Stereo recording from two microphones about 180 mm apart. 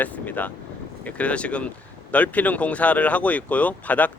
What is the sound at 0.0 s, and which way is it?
Speech, 10° left (ahead or behind).